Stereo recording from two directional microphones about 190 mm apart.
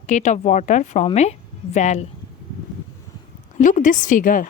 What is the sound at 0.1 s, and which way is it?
Speech, 40° left (ahead or behind).